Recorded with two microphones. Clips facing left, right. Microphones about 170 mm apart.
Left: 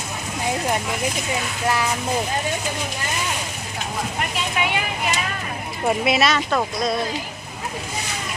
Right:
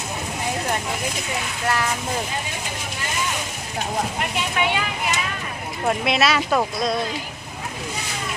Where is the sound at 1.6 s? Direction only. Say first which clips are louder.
Left 1 dB; 10° left (ahead or behind).